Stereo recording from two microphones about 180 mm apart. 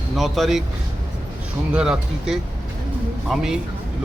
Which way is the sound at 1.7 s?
5° right (ahead or behind).